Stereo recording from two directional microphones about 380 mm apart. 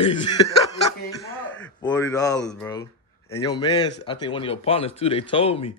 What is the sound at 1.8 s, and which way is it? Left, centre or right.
Speech, centre.